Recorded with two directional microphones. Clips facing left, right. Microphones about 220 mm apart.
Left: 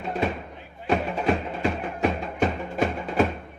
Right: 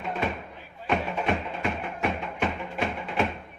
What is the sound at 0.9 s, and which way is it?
Music, 35° left (ahead or behind).